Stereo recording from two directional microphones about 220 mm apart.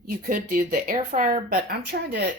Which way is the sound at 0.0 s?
40° right (ahead or behind).